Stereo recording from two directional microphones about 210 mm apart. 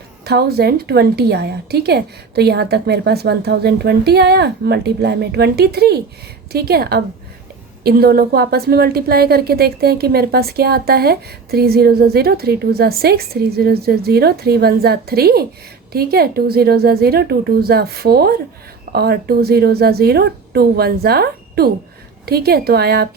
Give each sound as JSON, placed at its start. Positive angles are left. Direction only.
{"t": 0.3, "sound": "a woman's voice", "side_deg": -50}